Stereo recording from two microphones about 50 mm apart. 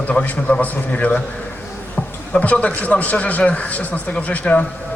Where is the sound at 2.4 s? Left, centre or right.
Left.